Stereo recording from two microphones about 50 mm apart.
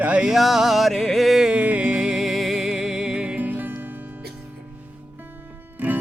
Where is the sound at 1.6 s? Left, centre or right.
Right.